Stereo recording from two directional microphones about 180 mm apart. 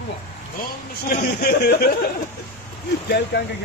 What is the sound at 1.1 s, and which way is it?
Speech, 60° left (ahead or behind).